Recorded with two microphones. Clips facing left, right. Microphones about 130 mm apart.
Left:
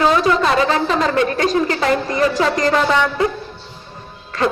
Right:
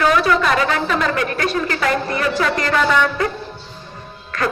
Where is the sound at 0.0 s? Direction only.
30° left (ahead or behind).